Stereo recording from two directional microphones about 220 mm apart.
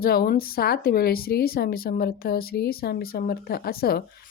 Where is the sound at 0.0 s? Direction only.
45° left (ahead or behind).